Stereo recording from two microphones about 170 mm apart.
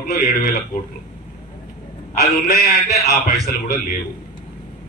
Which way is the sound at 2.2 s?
65° left (ahead or behind).